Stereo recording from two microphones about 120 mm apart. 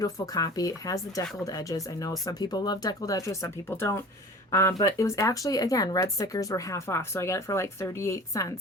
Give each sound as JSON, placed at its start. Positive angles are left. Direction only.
{"t": 0.0, "sound": "speech", "side_deg": 30}